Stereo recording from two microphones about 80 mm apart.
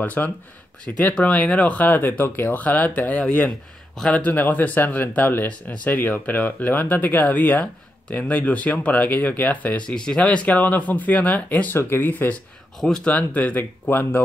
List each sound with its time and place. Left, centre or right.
0.0 s speech: left
12.8 s speech: centre; by 14.2 s left